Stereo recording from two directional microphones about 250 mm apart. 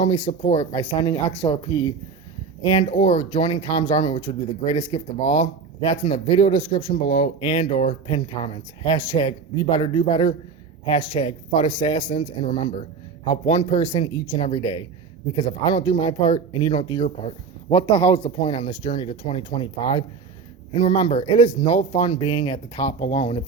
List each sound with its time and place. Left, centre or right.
0.0 s speech: left
0.8 s speech: centre
2.7 s speech: left
6.4 s speech: centre
20.7 s speech: left